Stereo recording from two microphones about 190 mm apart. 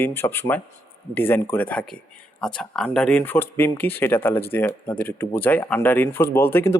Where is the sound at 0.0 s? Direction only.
10° left (ahead or behind).